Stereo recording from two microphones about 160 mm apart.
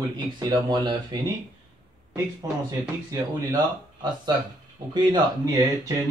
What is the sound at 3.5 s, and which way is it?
A man's voice, 25° right (ahead or behind).